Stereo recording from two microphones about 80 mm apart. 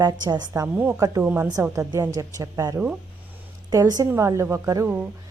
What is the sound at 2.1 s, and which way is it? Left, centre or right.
Speech, right.